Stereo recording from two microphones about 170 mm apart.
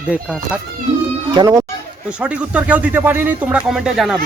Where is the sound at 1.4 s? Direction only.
25° right (ahead or behind).